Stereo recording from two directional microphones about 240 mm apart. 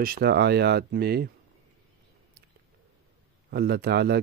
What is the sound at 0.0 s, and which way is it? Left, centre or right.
Speech, right.